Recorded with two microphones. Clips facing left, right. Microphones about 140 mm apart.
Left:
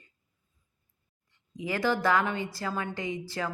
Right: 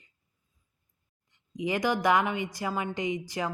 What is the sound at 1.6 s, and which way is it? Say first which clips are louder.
A woman's voice: right 1 dB; 20° right (ahead or behind).